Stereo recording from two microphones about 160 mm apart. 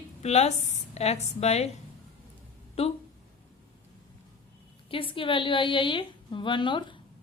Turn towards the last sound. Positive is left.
turn(degrees=30)  # may be behind; listen again after turning